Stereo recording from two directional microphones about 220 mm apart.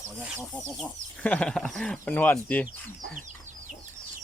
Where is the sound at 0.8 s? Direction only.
5° left (ahead or behind).